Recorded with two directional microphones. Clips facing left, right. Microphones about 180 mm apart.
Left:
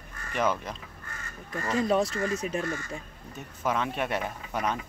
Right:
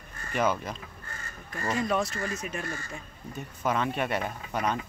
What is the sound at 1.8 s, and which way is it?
Speech, 30° left (ahead or behind).